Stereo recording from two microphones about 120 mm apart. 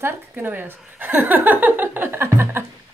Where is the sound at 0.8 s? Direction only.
15° right (ahead or behind).